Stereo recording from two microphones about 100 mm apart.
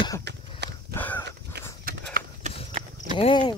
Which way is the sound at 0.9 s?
20° left (ahead or behind).